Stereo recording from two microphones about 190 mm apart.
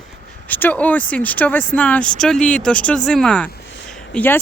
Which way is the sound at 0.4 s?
10° left (ahead or behind).